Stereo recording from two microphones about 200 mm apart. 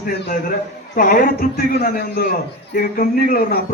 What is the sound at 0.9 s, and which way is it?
A man's voice, 45° left (ahead or behind).